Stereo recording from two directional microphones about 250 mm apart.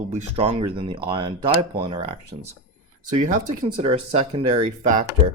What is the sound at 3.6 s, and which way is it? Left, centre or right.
Speech, right.